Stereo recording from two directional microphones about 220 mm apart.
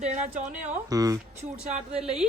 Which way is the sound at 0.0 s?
30° right (ahead or behind).